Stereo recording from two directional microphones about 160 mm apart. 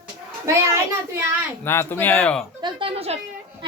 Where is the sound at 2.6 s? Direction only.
30° right (ahead or behind).